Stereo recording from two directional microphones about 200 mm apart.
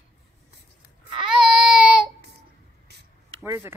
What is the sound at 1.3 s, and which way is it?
Baby cry, 5° right (ahead or behind).